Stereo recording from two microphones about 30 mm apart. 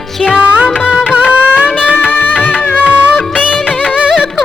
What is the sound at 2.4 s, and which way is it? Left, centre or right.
Music, left.